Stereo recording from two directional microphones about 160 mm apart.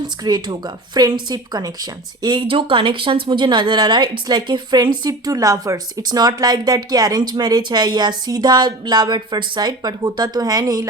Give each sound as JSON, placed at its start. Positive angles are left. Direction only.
{"t": 0.3, "sound": "speech", "side_deg": -25}